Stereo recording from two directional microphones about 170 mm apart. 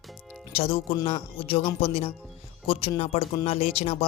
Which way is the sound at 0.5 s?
35° left (ahead or behind).